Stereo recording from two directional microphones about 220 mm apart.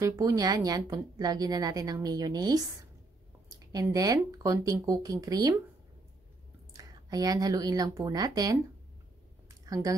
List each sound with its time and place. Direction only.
0.0 s a woman's voice: 15° right (ahead or behind)
6.7 s speech: 15° right (ahead or behind)
9.5 s a sound: 15° right (ahead or behind)